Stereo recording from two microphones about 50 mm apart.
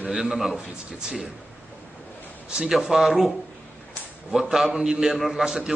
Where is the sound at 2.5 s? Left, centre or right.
Centre.